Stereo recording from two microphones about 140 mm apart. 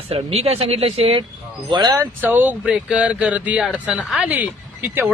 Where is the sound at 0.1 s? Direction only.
45° right (ahead or behind).